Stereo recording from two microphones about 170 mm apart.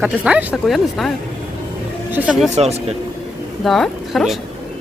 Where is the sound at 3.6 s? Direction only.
Centre (ahead or behind).